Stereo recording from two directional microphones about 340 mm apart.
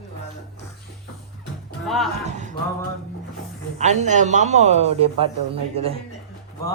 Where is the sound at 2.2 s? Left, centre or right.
Right.